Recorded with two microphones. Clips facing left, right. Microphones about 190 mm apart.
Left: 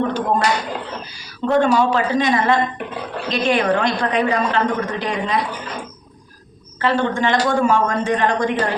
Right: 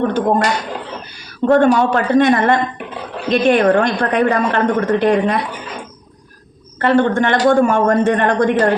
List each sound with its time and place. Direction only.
0.1 s speech: 50° right (ahead or behind)
1.5 s a woman's voice: 55° right (ahead or behind)
6.7 s a woman's voice: 55° right (ahead or behind)